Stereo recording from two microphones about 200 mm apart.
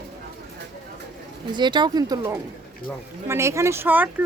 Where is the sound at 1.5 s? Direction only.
20° right (ahead or behind).